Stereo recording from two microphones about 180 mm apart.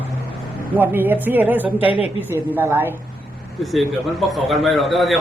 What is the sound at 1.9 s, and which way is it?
Speech, 30° left (ahead or behind).